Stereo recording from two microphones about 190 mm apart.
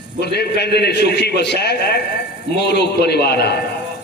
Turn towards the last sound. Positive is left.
turn(degrees=60)  # may be behind; listen again after turning